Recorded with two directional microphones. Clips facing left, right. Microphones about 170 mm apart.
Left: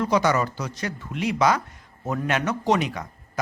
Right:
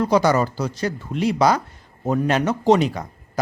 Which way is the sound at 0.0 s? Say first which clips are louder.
Right 4 dB; 35° right (ahead or behind).